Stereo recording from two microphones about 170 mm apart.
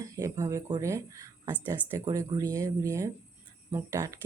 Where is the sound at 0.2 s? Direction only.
20° right (ahead or behind).